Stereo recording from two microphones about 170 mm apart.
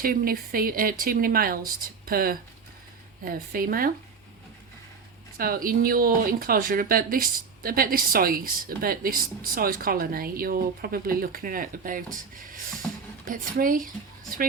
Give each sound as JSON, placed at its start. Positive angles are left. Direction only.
{"t": 0.0, "sound": "speech", "side_deg": -60}
{"t": 5.4, "sound": "speech", "side_deg": -55}